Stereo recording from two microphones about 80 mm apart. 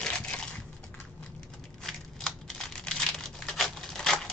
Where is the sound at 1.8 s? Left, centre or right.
Centre.